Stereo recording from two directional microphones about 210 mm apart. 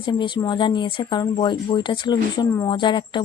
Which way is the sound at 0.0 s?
20° left (ahead or behind).